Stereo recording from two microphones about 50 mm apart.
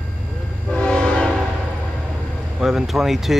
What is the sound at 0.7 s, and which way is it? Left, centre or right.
Train horn, centre.